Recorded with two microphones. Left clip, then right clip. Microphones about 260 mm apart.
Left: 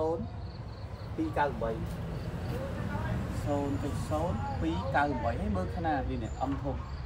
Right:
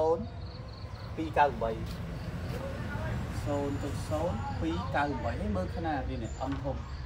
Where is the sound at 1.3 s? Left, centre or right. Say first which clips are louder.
Right 5 dB; centre.